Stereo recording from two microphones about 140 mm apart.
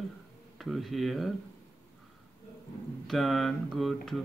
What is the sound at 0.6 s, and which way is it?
Speech, centre (ahead or behind).